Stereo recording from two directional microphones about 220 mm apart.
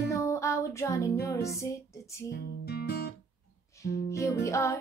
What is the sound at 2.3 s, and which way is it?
Guitar, 50° left (ahead or behind).